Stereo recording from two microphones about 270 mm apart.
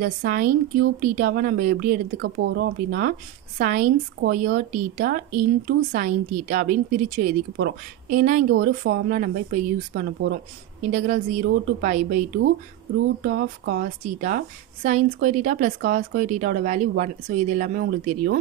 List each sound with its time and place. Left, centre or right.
0.0 s speech: right
13.3 s speech: right